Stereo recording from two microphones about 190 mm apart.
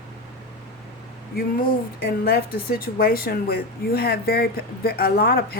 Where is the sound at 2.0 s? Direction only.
55° left (ahead or behind).